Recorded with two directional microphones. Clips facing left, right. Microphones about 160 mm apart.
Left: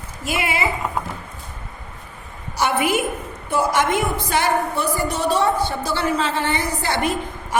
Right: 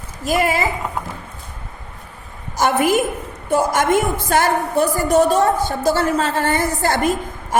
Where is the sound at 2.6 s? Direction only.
45° right (ahead or behind).